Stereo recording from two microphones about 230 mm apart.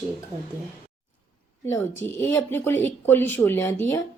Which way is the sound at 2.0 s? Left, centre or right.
Centre.